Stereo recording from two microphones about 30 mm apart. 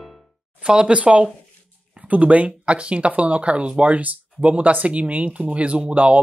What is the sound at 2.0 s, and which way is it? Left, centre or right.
Speech, right.